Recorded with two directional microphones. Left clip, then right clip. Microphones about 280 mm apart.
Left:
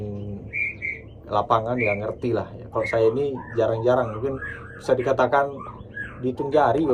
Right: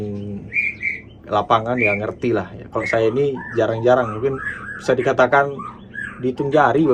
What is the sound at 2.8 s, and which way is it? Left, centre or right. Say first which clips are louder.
Speech: right 3 dB; centre.